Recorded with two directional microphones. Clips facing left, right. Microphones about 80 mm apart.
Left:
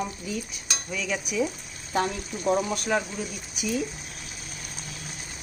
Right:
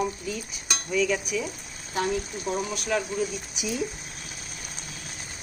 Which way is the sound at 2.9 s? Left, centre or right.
Centre.